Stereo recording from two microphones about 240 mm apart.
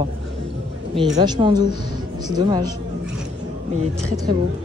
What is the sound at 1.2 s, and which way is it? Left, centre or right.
A man's voice, centre.